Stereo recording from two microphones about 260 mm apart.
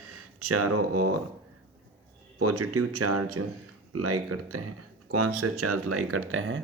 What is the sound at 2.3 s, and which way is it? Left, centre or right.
Speech, right.